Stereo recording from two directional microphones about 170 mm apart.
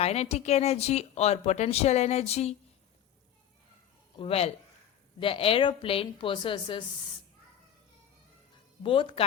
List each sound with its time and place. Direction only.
0.0 s speech: 40° left (ahead or behind)
4.2 s speech: 35° left (ahead or behind)
8.8 s speech: 30° left (ahead or behind)